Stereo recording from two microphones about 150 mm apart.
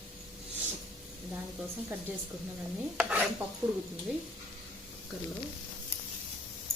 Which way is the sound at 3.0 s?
10° right (ahead or behind).